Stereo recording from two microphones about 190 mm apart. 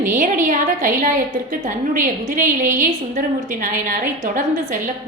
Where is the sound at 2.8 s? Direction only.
45° right (ahead or behind).